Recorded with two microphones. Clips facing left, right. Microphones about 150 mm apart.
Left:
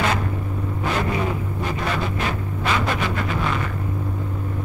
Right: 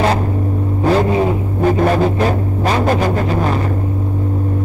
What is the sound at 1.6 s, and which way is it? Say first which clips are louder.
Music: right 14 dB; 45° right (ahead or behind).